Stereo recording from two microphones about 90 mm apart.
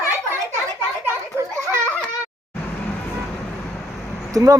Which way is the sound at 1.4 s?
30° right (ahead or behind).